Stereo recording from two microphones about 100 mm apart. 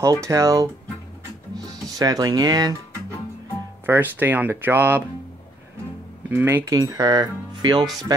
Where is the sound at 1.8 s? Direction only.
40° right (ahead or behind).